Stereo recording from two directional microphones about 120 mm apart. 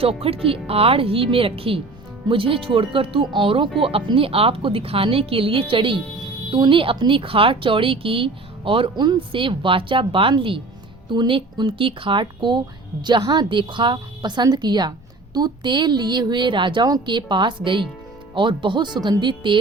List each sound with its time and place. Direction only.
0.0 s speech: 55° right (ahead or behind)